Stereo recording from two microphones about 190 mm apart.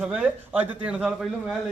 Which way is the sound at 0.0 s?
5° right (ahead or behind).